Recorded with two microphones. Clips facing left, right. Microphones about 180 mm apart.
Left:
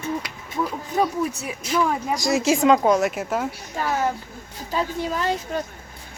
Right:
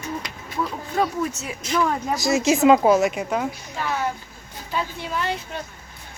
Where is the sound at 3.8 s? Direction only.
45° left (ahead or behind).